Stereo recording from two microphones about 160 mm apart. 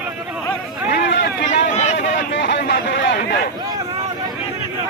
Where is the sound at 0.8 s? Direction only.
90° left.